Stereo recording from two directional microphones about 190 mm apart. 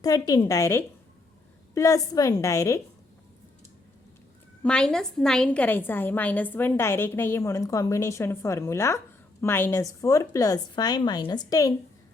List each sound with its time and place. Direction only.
0.0 s a woman's voice: 20° left (ahead or behind)
4.6 s a woman's voice: 5° left (ahead or behind)